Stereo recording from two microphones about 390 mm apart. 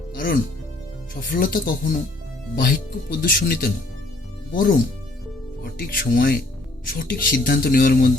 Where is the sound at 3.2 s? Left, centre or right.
Left.